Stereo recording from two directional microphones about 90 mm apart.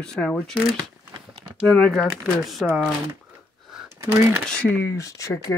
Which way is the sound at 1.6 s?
5° left (ahead or behind).